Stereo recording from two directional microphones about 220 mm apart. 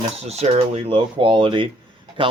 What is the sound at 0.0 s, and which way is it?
Speech, 30° right (ahead or behind).